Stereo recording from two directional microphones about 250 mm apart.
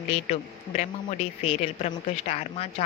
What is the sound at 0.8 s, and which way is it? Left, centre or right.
Speech, left.